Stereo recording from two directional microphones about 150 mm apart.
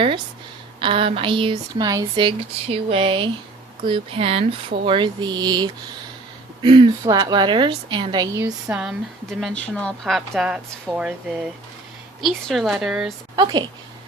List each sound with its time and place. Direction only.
0.8 s speech: 35° right (ahead or behind)
1.9 s speech: 25° right (ahead or behind)
2.2 s speech: 40° right (ahead or behind); by 8.7 s 25° right (ahead or behind)
8.7 s a woman's voice: 5° right (ahead or behind)
13.3 s speech: 30° right (ahead or behind)